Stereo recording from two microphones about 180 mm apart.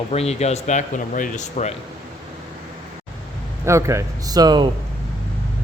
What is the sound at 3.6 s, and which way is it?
A man's voice, 15° right (ahead or behind).